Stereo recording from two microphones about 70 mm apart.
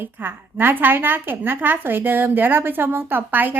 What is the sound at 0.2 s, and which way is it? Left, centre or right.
Speech, right.